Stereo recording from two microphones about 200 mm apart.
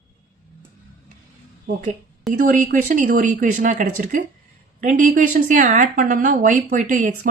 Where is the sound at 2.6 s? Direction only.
45° right (ahead or behind).